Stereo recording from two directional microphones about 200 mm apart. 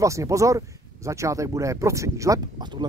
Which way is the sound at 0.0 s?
15° right (ahead or behind).